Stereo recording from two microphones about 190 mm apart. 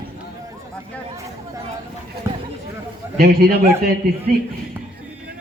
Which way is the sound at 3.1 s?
55° right (ahead or behind).